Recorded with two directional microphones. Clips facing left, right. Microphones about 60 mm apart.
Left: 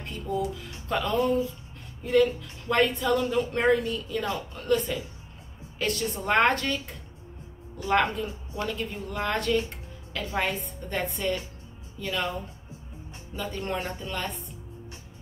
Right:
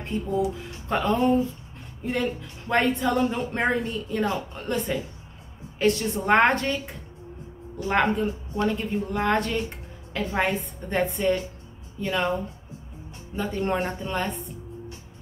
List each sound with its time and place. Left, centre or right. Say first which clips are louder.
0.0 s speech: right 4 dB; right
2.7 s speech: right 1 dB; right
7.9 s speech: right 2 dB; right
13.4 s speech: right 5 dB; right